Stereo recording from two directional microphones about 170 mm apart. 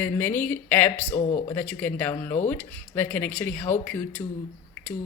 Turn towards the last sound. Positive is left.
turn(degrees=10)  # may be behind; listen again after turning